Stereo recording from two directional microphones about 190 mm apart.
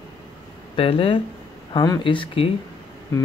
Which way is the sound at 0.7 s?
30° left (ahead or behind).